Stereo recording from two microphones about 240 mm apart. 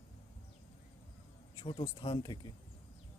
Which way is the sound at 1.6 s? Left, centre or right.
Centre.